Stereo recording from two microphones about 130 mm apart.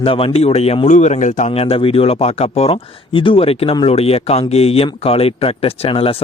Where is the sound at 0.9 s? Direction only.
70° left (ahead or behind).